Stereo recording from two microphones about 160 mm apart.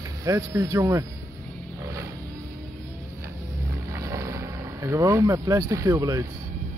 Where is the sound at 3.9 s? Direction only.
20° right (ahead or behind).